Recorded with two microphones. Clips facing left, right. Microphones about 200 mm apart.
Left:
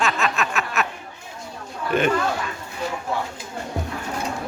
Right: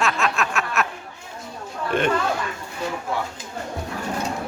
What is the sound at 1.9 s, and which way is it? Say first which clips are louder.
Speech: left 2 dB; 5° left (ahead or behind).